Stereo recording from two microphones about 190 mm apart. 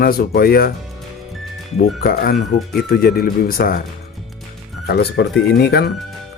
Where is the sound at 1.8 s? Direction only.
50° left (ahead or behind).